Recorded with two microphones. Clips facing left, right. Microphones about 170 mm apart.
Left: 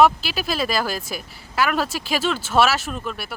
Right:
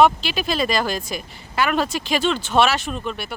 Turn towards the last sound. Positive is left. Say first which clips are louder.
# right 2 dB
turn(degrees=5)  # may be behind; listen again after turning